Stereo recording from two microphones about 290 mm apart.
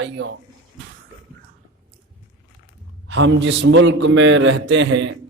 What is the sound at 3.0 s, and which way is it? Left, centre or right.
A man's voice, right.